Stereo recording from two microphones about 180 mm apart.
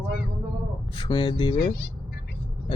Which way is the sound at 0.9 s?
30° left (ahead or behind).